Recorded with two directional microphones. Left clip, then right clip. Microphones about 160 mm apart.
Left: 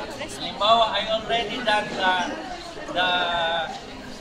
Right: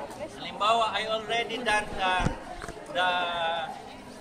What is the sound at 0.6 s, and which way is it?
A man's voice, 15° right (ahead or behind).